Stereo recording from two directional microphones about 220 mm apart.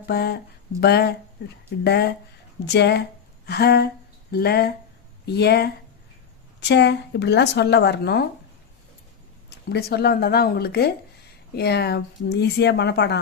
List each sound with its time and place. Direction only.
0.0 s speech: 45° left (ahead or behind)
9.6 s speech: 45° left (ahead or behind)